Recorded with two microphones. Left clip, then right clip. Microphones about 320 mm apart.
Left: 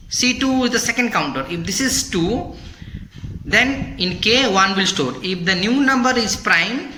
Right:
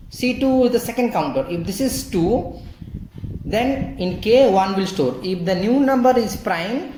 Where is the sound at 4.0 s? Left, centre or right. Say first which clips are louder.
Right 2 dB; left.